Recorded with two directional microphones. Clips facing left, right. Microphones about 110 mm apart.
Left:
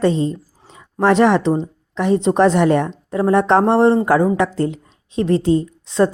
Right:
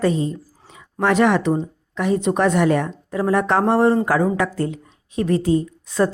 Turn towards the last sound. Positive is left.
turn(degrees=25)  # may be behind; listen again after turning